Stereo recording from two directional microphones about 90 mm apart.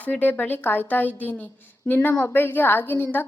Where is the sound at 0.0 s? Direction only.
20° left (ahead or behind).